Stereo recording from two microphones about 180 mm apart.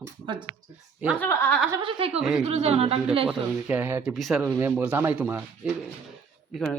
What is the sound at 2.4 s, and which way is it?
Speech, 35° right (ahead or behind).